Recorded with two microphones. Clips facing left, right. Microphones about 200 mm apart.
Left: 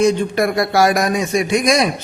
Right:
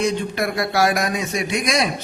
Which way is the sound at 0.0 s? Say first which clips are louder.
Left 6 dB; 45° left (ahead or behind).